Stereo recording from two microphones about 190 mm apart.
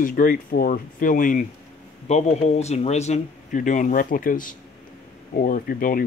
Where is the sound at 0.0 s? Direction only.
45° left (ahead or behind).